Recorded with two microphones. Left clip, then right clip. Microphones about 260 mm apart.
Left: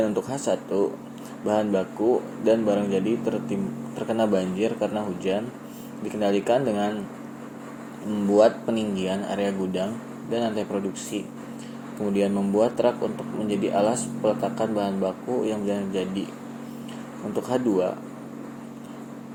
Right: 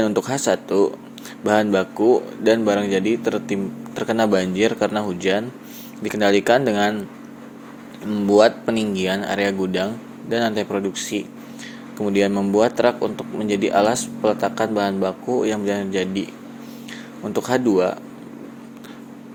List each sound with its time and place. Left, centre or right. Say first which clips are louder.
0.0 s speech: right 5 dB; right
8.1 s speech: right 4 dB; right
17.3 s speech: right 5 dB; right